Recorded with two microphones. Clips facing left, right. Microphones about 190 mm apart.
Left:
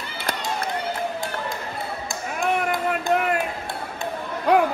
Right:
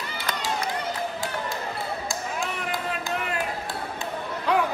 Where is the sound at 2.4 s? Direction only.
55° left (ahead or behind).